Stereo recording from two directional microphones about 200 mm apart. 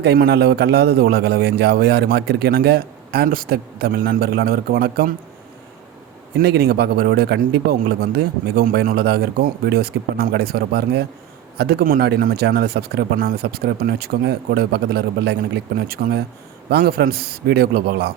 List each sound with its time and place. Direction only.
0.0 s a man's voice: 55° right (ahead or behind)
6.4 s a man's voice: 50° right (ahead or behind)